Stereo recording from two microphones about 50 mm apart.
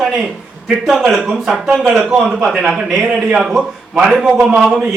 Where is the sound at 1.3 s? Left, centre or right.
Centre.